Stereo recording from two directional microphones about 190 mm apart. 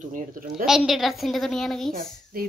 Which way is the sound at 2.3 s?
50° right (ahead or behind).